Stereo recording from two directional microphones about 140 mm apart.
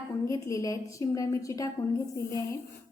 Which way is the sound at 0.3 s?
25° left (ahead or behind).